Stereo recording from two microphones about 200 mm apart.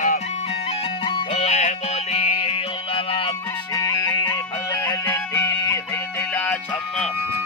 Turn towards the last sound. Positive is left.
turn(degrees=10)  # may be behind; listen again after turning